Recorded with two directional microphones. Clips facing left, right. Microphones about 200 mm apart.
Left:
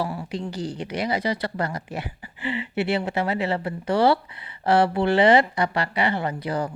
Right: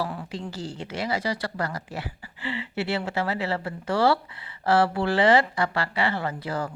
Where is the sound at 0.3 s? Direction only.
20° left (ahead or behind).